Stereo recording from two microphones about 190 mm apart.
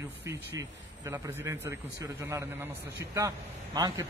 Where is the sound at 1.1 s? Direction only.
15° right (ahead or behind).